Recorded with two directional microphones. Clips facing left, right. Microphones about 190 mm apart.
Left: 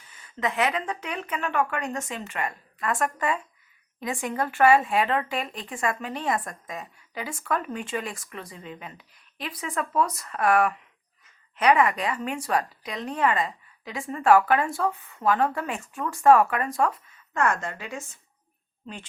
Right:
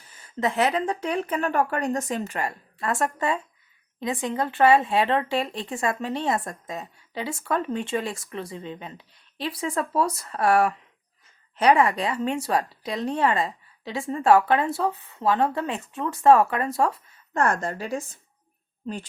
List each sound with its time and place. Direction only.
0.0 s speech: 35° right (ahead or behind)